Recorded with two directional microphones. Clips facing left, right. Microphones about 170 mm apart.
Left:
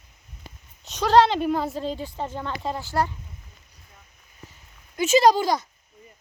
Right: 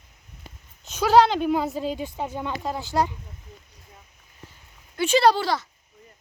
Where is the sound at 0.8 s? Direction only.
Centre (ahead or behind).